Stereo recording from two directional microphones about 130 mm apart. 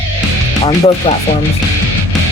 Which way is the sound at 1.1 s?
50° left (ahead or behind).